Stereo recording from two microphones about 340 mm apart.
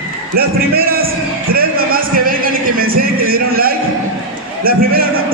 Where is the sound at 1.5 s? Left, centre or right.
Right.